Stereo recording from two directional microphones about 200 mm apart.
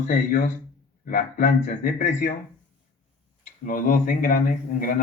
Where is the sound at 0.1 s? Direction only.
45° left (ahead or behind).